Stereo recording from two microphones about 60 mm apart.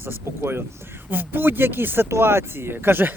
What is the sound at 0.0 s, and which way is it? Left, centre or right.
Speech, right.